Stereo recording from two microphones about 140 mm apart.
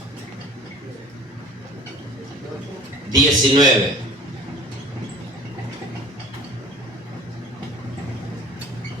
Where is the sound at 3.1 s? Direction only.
30° right (ahead or behind).